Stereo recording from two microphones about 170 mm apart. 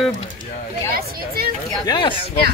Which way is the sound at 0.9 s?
65° right (ahead or behind).